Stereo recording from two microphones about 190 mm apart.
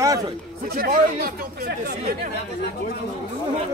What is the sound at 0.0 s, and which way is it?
Chatter, 15° right (ahead or behind).